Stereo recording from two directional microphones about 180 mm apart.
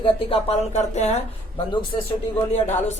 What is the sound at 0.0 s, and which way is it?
Speech, 30° left (ahead or behind).